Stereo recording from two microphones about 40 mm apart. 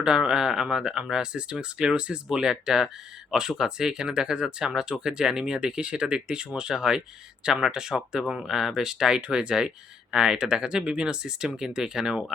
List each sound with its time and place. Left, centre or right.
0.0 s speech: centre